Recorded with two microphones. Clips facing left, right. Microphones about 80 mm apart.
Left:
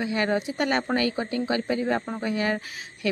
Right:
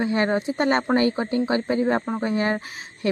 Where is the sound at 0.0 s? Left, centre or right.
Right.